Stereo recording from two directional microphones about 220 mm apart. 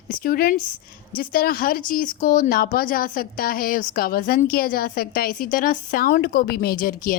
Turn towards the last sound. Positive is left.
turn(degrees=40)  # may be behind; listen again after turning